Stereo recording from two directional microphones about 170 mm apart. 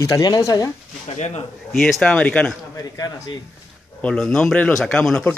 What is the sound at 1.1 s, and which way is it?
Speech, 40° left (ahead or behind).